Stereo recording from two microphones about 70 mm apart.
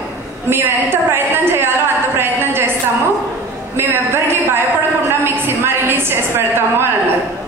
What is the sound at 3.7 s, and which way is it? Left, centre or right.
A man's voice, right.